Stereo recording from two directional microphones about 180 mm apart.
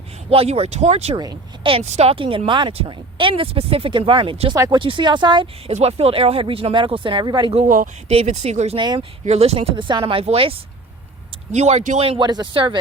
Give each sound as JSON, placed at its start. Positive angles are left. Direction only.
{"t": 0.3, "sound": "speech", "side_deg": -35}
{"t": 1.2, "sound": "speech", "side_deg": -25}
{"t": 7.5, "sound": "speech", "side_deg": -40}
{"t": 11.5, "sound": "speech", "side_deg": -40}